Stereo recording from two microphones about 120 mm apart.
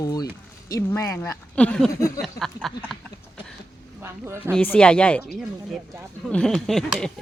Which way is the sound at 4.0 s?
20° right (ahead or behind).